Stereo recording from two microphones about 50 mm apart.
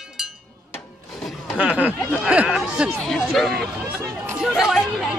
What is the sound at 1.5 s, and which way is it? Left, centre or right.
Speech, right.